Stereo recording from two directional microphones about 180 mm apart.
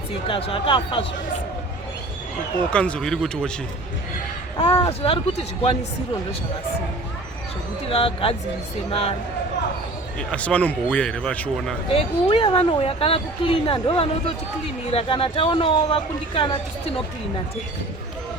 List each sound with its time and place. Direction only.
0.3 s speech: 30° left (ahead or behind)
2.6 s speech: 5° left (ahead or behind)
4.5 s speech: 25° left (ahead or behind)
7.9 s a woman's voice: 30° left (ahead or behind)
10.2 s speech: 5° left (ahead or behind)
11.9 s a woman's voice: 30° left (ahead or behind)